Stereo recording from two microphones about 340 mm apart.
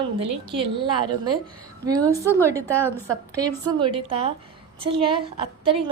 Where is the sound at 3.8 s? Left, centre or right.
Centre.